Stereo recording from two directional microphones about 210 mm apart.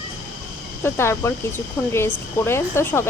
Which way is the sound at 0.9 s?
10° left (ahead or behind).